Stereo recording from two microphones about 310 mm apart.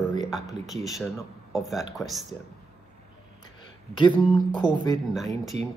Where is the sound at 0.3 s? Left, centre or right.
Centre.